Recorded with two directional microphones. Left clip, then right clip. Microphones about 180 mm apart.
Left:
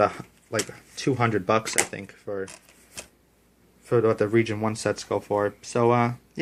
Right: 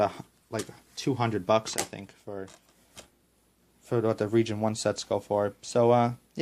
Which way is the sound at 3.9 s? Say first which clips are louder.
Left 5 dB; 45° right (ahead or behind).